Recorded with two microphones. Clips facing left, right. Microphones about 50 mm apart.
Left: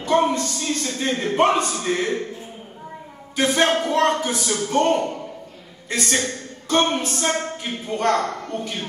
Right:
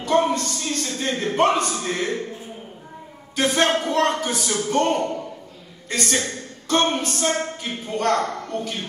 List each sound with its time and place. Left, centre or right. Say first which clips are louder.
0.1 s a sound: left 1 dB; centre
0.5 s a man's voice: left 1 dB; centre
3.3 s a man's voice: left 1 dB; centre
7.9 s speech: left 1 dB; left
8.3 s speech: even; centre